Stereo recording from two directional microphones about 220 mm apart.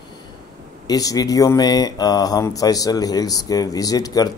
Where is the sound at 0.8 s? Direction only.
15° left (ahead or behind).